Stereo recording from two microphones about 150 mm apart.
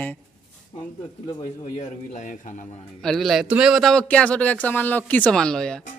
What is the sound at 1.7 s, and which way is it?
Speech, 55° left (ahead or behind).